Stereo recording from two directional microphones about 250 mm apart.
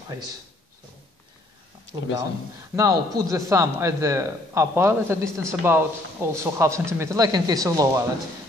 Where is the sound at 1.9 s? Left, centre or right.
Centre.